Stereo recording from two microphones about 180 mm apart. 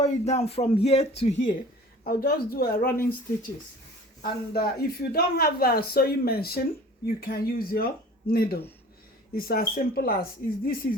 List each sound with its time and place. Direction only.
0.0 s speech: 40° left (ahead or behind)
2.0 s speech: 55° left (ahead or behind)
4.2 s speech: 60° left (ahead or behind)